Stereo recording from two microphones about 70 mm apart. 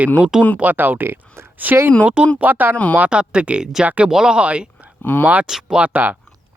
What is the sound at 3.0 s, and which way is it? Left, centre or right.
Speech, centre.